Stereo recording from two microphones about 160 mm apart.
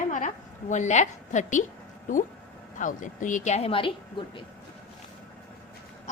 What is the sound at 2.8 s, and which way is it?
A woman's voice, 55° left (ahead or behind).